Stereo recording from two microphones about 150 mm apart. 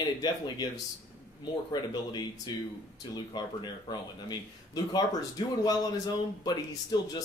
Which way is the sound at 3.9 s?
25° left (ahead or behind).